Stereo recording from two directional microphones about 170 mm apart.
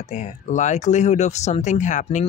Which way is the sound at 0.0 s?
45° left (ahead or behind).